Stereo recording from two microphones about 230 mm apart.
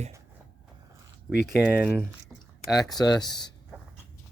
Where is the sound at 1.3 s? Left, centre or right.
Centre.